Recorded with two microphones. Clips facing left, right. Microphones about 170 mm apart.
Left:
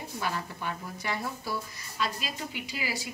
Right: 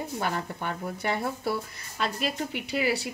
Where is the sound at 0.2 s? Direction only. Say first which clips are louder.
Right 1 dB; 55° right (ahead or behind).